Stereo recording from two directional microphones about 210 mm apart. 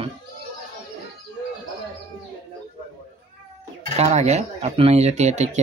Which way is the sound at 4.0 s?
30° right (ahead or behind).